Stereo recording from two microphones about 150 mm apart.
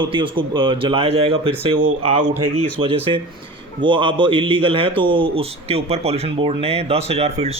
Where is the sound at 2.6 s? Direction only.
40° right (ahead or behind).